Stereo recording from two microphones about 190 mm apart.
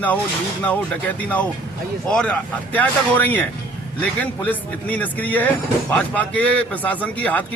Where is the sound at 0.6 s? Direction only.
10° left (ahead or behind).